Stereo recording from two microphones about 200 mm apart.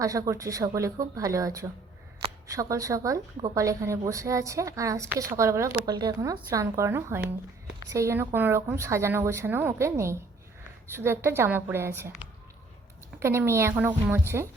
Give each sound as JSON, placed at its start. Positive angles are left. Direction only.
{"t": 0.0, "sound": "a woman's voice", "side_deg": -15}
{"t": 13.1, "sound": "a woman's voice", "side_deg": -15}